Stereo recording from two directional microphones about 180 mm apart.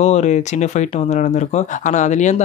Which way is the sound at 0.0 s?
40° left (ahead or behind).